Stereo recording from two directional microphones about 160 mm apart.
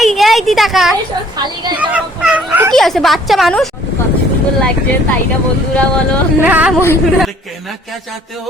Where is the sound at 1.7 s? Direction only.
10° right (ahead or behind).